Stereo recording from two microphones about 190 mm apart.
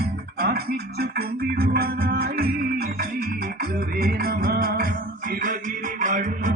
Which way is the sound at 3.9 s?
50° right (ahead or behind).